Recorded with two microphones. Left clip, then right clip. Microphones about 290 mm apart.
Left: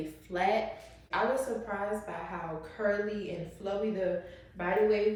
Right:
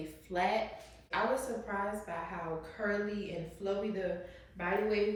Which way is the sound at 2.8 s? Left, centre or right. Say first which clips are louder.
Left 6 dB; centre.